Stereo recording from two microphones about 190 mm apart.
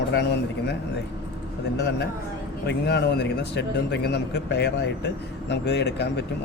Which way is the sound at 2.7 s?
60° left (ahead or behind).